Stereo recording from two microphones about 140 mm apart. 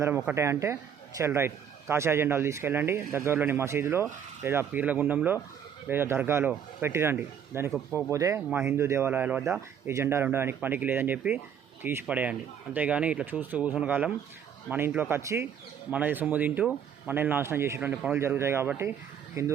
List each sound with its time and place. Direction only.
0.3 s speech: 15° right (ahead or behind)